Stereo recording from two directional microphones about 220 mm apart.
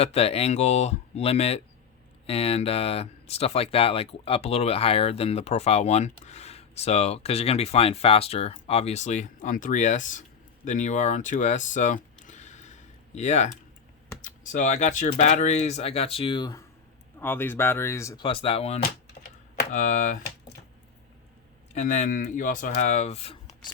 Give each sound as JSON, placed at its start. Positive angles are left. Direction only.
{"t": 0.0, "sound": "speech", "side_deg": 30}
{"t": 17.2, "sound": "speech", "side_deg": 10}
{"t": 21.8, "sound": "speech", "side_deg": 35}